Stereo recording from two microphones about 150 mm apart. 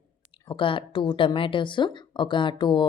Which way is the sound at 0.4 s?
35° left (ahead or behind).